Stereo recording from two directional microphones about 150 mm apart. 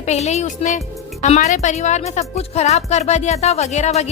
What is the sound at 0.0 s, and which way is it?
Speech, 50° left (ahead or behind).